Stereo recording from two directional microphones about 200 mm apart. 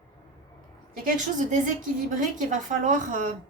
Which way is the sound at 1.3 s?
40° right (ahead or behind).